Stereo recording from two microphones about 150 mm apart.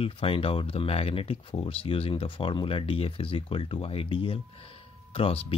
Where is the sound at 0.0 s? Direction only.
35° left (ahead or behind).